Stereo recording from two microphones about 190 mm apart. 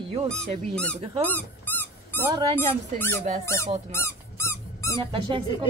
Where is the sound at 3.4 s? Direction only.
15° left (ahead or behind).